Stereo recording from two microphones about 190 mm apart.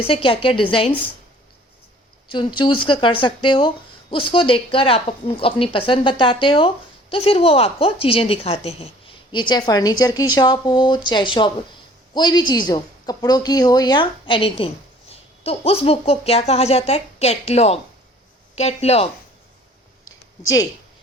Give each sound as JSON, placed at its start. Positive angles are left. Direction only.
{"t": 0.1, "sound": "a woman's voice", "side_deg": 30}
{"t": 2.3, "sound": "a woman's voice", "side_deg": 25}
{"t": 20.1, "sound": "a sound", "side_deg": 15}